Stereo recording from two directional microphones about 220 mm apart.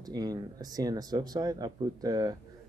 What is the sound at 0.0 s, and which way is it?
Speech, 15° right (ahead or behind).